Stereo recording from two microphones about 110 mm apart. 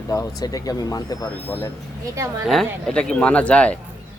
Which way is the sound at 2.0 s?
25° right (ahead or behind).